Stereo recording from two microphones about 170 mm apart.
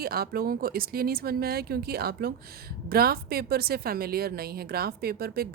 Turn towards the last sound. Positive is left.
turn(degrees=-65)  # may be behind; listen again after turning